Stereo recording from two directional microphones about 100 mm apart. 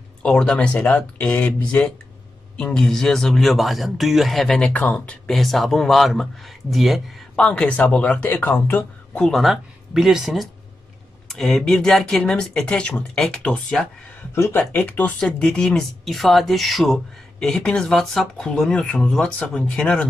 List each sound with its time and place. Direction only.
0.2 s speech: 10° left (ahead or behind)
9.2 s speech: centre (ahead or behind)
14.3 s speech: 25° left (ahead or behind); by 20.1 s 10° left (ahead or behind)